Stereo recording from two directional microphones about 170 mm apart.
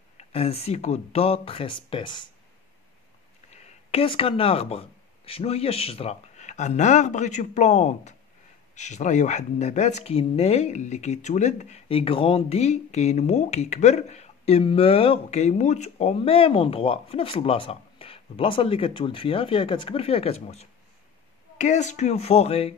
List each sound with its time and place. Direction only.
0.2 s speech: 35° left (ahead or behind)
3.4 s speech: 40° left (ahead or behind)